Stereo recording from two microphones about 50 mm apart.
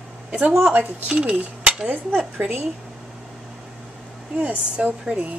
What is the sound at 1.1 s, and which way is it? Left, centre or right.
Speech, centre.